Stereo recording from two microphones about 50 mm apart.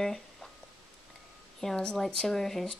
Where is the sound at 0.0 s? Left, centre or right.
Centre.